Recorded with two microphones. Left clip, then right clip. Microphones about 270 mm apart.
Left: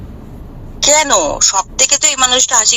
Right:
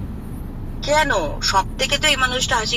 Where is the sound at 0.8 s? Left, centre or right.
Left.